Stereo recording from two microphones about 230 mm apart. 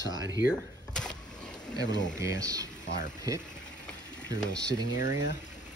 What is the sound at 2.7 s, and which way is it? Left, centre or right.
Speech, left.